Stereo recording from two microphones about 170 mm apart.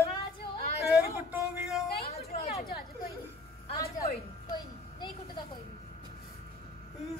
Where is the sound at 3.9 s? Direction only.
20° left (ahead or behind).